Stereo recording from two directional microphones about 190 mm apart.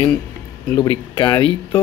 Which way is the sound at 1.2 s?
25° left (ahead or behind).